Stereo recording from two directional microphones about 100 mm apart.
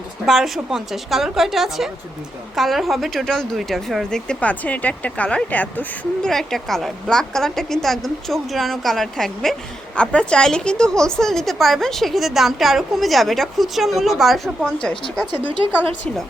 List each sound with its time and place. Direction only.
0.3 s a woman's voice: centre (ahead or behind); by 5.8 s 15° left (ahead or behind)
6.2 s a woman's voice: 5° left (ahead or behind)
15.3 s speech: 60° right (ahead or behind)